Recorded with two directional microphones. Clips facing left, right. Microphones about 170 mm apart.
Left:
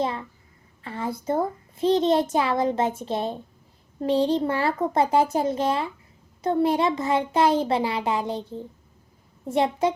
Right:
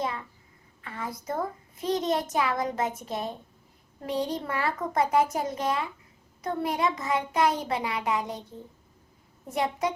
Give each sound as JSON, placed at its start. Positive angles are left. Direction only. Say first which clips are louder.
{"t": 0.0, "sound": "a child's voice", "louder": "left 5 dB", "side_deg": 30}